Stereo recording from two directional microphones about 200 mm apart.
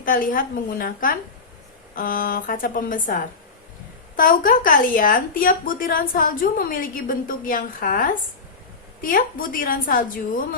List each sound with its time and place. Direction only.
0.0 s a woman's voice: 45° left (ahead or behind)